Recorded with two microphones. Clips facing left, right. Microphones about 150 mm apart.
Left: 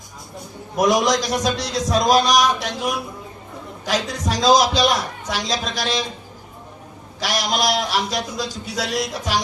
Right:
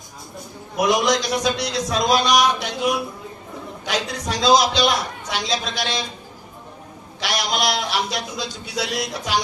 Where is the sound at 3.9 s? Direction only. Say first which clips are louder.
Left 2 dB; 40° left (ahead or behind).